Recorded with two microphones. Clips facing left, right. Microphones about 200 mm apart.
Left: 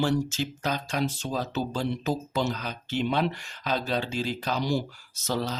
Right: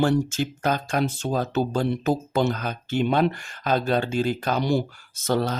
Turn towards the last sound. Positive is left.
turn(degrees=-55)  # may be behind; listen again after turning